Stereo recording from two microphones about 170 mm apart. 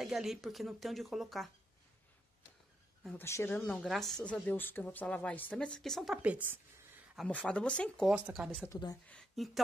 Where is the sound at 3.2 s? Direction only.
15° left (ahead or behind).